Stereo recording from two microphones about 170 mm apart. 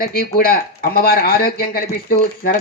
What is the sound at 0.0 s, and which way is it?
Speech, 60° left (ahead or behind).